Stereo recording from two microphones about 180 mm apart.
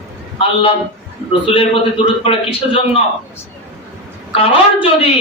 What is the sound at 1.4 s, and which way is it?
Speech, 30° left (ahead or behind).